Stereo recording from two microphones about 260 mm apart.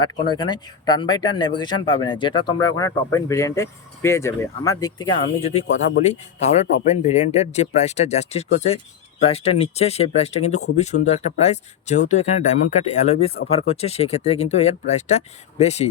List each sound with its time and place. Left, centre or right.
0.0 s speech: centre